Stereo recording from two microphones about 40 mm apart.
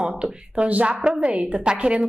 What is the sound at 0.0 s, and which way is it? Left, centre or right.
Speech, right.